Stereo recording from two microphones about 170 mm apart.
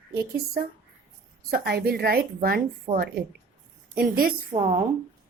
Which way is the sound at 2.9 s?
25° right (ahead or behind).